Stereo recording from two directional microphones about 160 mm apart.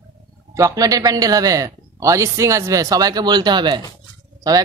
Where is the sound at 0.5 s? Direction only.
20° right (ahead or behind).